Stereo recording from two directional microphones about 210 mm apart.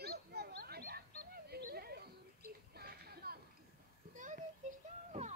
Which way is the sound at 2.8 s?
45° right (ahead or behind).